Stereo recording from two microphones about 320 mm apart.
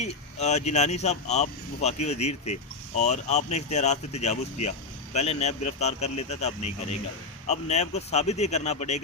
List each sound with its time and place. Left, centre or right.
0.0 s speech: left